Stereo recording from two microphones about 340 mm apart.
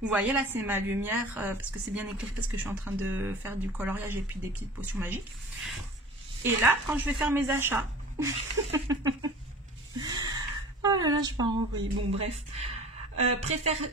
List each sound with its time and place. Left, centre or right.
0.0 s a woman's voice: centre
6.4 s speech: centre
9.9 s a sound: centre
12.1 s speech: centre